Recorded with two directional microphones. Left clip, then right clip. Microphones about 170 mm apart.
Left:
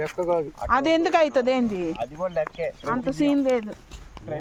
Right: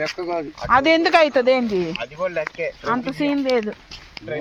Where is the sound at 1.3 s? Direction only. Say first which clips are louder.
Right 5 dB; 40° right (ahead or behind).